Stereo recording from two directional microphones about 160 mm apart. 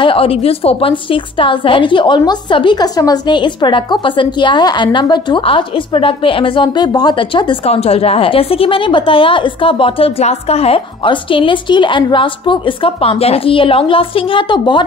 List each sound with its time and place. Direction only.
0.0 s a woman's voice: 35° left (ahead or behind)